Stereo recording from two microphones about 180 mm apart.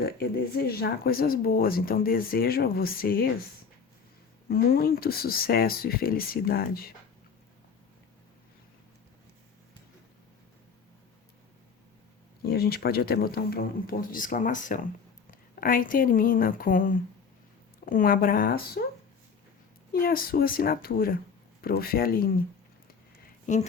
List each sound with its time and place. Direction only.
0.0 s speech: 60° left (ahead or behind)
4.4 s speech: 55° left (ahead or behind)
12.5 s speech: 60° left (ahead or behind)
19.9 s speech: 55° left (ahead or behind)
23.5 s speech: 45° left (ahead or behind)